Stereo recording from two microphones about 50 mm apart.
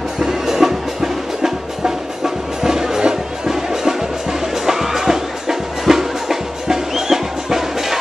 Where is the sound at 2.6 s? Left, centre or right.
Centre.